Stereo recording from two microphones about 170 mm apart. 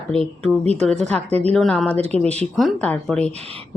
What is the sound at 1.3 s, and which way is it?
Speech, 40° right (ahead or behind).